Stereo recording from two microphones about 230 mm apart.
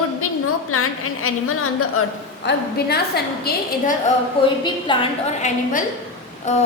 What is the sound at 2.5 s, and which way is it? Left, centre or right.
Speech, left.